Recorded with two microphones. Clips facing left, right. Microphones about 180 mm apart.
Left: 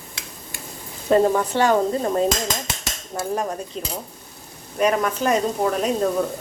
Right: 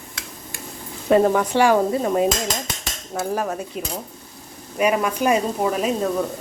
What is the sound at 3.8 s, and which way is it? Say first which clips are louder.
Speech: right 1 dB; 10° right (ahead or behind).